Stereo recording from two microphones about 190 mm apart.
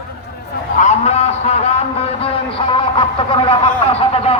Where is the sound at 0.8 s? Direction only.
35° left (ahead or behind).